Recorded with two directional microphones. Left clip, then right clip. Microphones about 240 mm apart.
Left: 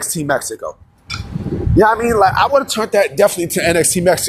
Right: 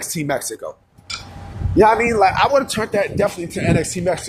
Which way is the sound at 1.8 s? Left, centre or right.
Centre.